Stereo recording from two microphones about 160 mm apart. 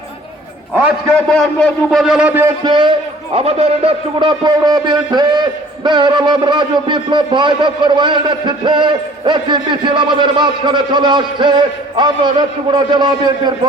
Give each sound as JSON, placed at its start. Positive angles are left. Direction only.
{"t": 0.7, "sound": "a sound", "side_deg": -10}
{"t": 1.3, "sound": "a man's voice", "side_deg": 5}
{"t": 2.4, "sound": "a man's voice", "side_deg": -25}
{"t": 3.3, "sound": "a man's voice", "side_deg": -40}